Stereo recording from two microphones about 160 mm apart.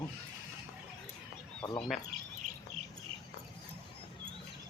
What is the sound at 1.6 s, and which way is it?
Speech, 10° left (ahead or behind).